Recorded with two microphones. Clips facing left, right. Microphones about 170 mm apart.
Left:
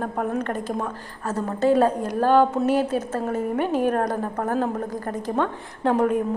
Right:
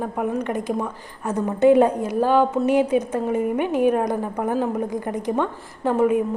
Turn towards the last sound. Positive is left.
turn(degrees=-5)  # may be behind; listen again after turning